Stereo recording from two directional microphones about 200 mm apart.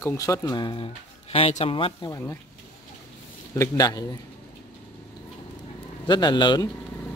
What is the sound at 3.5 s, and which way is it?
Speech, 15° left (ahead or behind).